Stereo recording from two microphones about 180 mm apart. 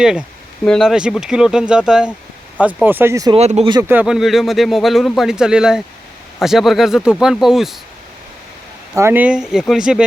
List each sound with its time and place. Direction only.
0.0 s speech: 5° right (ahead or behind)
3.3 s speech: 35° right (ahead or behind)
3.7 s speech: 20° right (ahead or behind)
3.9 s speech: 5° right (ahead or behind)
9.0 s speech: 10° right (ahead or behind)